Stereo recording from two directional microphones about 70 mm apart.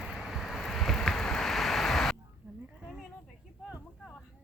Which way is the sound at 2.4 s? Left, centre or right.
Centre.